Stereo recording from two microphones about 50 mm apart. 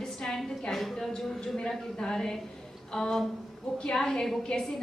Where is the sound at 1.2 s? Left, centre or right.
Centre.